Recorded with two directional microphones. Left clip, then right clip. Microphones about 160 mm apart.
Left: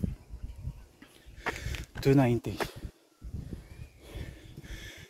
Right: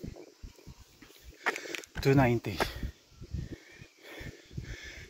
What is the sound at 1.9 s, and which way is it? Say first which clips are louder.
Speech: left 1 dB; 50° left (ahead or behind).